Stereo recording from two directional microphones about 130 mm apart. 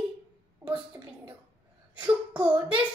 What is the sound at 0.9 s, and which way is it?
Speech, 20° right (ahead or behind).